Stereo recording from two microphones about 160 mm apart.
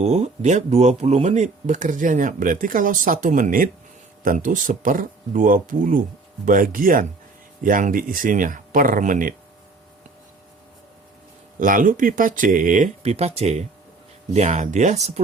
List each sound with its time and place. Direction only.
0.0 s speech: 45° right (ahead or behind)
11.6 s speech: 55° right (ahead or behind)